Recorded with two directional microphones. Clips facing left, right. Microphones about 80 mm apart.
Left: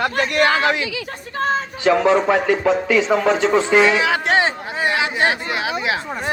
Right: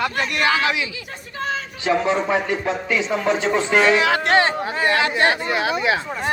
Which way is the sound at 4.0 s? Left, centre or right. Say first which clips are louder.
Even; centre.